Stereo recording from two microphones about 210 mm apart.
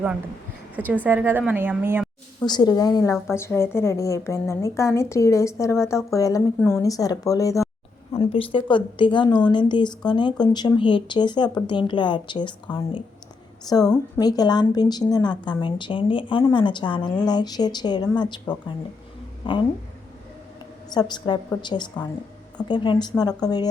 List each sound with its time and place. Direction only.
0.8 s a woman's voice: 10° left (ahead or behind)
1.0 s a woman's voice: 10° right (ahead or behind)
2.5 s a woman's voice: 20° left (ahead or behind)
8.1 s a woman's voice: 25° left (ahead or behind)
21.1 s a woman's voice: 20° left (ahead or behind)